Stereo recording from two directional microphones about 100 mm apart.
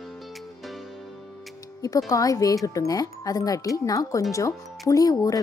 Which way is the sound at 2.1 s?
35° left (ahead or behind).